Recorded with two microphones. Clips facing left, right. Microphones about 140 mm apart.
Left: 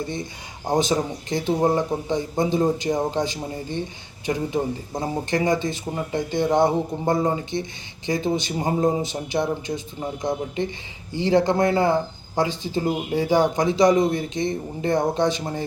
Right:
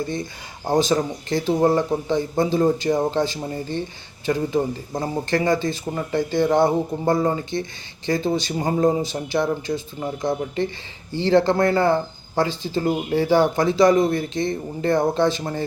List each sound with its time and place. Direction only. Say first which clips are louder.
0.7 s speech: right 2 dB; 20° left (ahead or behind)